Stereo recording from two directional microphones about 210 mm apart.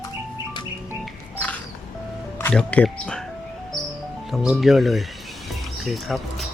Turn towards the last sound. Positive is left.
turn(degrees=0)  # may be behind; listen again after turning